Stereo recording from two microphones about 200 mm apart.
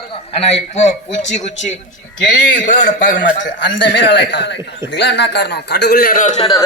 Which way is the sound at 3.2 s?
60° left (ahead or behind).